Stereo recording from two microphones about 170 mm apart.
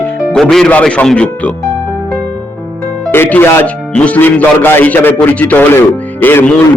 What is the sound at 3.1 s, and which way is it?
A man's voice, 10° left (ahead or behind).